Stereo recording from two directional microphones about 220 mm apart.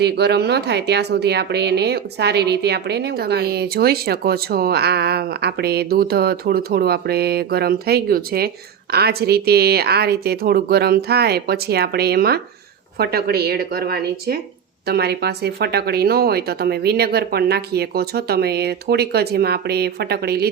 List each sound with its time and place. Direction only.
0.0 s a woman's voice: 50° right (ahead or behind)